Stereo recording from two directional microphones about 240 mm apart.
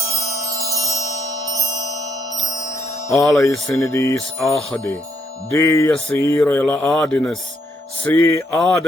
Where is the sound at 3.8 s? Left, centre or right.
Centre.